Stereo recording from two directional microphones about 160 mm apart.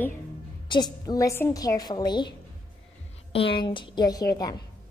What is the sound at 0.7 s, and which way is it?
A woman's voice, 25° left (ahead or behind).